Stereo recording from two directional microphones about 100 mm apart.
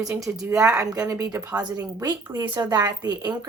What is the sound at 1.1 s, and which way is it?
Speech, 30° right (ahead or behind).